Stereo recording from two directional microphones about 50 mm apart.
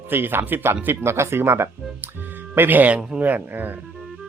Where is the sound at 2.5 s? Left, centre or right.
Right.